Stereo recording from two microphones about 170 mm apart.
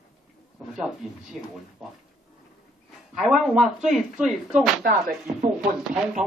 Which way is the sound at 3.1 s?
Centre (ahead or behind).